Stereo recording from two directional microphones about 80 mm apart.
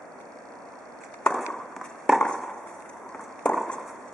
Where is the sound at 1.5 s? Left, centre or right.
Centre.